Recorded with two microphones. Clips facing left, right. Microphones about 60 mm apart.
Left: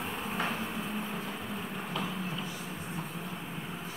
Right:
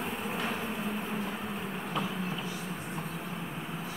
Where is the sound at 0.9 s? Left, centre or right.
Centre.